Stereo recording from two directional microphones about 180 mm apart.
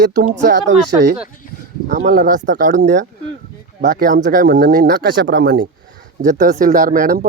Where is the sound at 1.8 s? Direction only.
45° right (ahead or behind).